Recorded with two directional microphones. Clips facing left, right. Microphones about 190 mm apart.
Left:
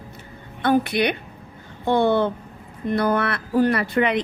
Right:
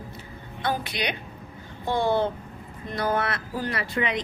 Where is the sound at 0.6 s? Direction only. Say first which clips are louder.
Left 9 dB; 55° left (ahead or behind).